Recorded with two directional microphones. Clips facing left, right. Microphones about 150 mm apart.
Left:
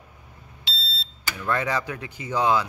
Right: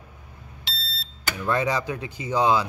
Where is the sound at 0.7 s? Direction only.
50° right (ahead or behind).